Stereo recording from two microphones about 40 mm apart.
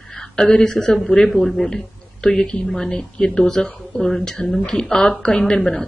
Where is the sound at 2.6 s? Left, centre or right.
Centre.